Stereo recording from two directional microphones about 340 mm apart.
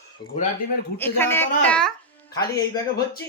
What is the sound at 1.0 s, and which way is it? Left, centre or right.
Speech, centre.